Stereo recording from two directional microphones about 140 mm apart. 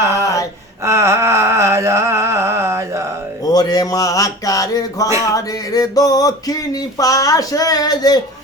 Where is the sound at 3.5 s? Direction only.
30° left (ahead or behind).